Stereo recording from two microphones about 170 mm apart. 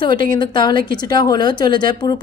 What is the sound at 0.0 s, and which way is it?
A woman's voice, 25° left (ahead or behind).